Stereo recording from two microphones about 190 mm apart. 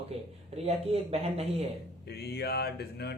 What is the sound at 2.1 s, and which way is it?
Speech, 55° left (ahead or behind).